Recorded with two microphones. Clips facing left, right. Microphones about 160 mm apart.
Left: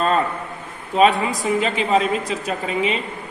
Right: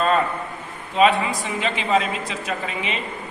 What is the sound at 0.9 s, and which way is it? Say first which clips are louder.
A woman's voice: left 2 dB; 40° left (ahead or behind).